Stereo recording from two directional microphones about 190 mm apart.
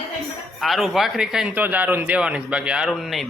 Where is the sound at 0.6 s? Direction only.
Centre (ahead or behind).